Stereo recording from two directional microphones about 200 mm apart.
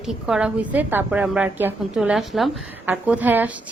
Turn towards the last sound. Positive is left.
turn(degrees=-10)  # may be behind; listen again after turning